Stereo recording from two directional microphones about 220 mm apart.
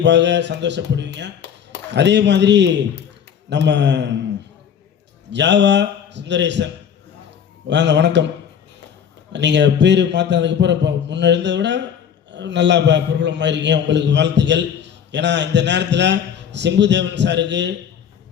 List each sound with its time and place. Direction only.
0.0 s a man's voice: 55° right (ahead or behind)
5.3 s a man's voice: 55° right (ahead or behind)
7.7 s a man's voice: 55° right (ahead or behind)
9.3 s a man's voice: 55° right (ahead or behind)